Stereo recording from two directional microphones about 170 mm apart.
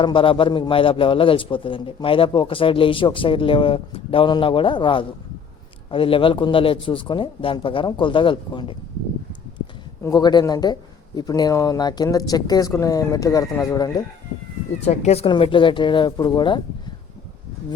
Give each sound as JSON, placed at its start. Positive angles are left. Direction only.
{"t": 0.0, "sound": "a man's voice", "side_deg": 30}
{"t": 10.0, "sound": "speech", "side_deg": 20}
{"t": 14.8, "sound": "speech", "side_deg": 40}